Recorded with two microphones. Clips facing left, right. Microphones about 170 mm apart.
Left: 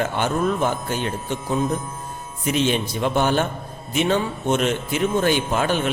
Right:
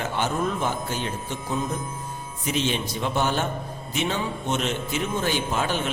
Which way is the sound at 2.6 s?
55° left (ahead or behind).